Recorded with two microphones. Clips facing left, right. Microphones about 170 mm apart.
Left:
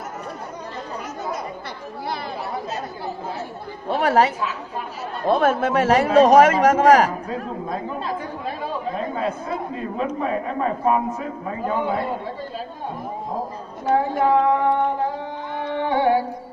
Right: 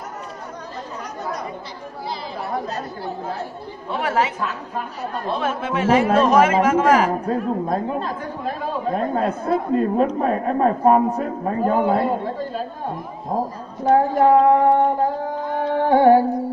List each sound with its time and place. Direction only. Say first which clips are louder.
3.9 s a woman's voice: left 4 dB; 40° left (ahead or behind)
5.3 s a man's voice: left 7 dB; 45° left (ahead or behind)
7.1 s a woman's voice: right 6 dB; 45° right (ahead or behind)
13.8 s a sound: right 4 dB; 45° right (ahead or behind)